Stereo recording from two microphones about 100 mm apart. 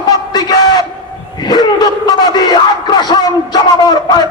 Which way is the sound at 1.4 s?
45° left (ahead or behind).